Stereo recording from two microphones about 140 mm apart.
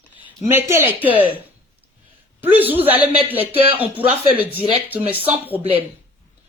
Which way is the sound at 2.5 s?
15° right (ahead or behind).